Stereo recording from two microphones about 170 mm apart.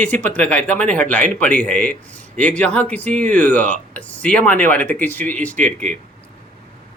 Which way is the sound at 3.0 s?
45° right (ahead or behind).